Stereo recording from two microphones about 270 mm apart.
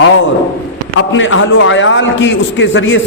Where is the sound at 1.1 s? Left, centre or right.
Left.